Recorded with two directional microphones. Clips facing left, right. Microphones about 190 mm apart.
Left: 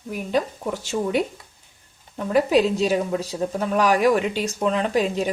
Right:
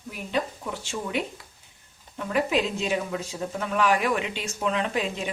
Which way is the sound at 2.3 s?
40° left (ahead or behind).